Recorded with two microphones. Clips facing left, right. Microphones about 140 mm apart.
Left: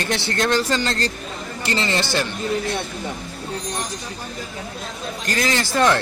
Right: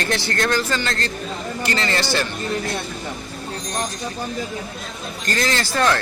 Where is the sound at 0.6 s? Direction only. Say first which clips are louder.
Left 2 dB; 35° left (ahead or behind).